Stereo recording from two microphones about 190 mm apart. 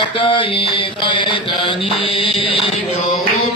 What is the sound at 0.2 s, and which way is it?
Mantra, 30° left (ahead or behind).